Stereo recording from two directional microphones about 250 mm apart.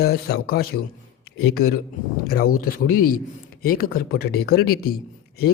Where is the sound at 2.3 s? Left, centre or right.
Left.